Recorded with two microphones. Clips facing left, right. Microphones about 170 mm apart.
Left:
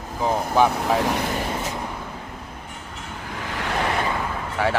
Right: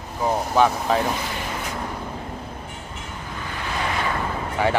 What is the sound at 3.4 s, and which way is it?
Vehicle, 90° left.